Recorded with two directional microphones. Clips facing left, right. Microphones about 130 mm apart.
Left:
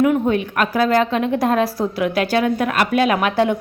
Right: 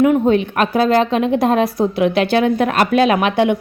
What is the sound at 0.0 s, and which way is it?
A woman's voice, 25° right (ahead or behind).